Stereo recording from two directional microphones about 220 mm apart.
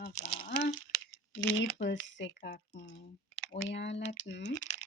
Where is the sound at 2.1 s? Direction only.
55° left (ahead or behind).